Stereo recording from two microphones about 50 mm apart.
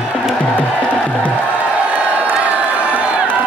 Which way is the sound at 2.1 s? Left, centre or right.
Right.